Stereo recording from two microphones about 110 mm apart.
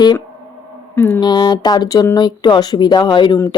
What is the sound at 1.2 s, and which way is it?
A woman's voice, 45° left (ahead or behind).